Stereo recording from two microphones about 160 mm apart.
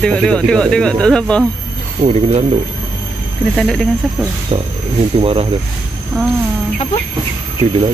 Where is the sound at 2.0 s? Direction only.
40° right (ahead or behind).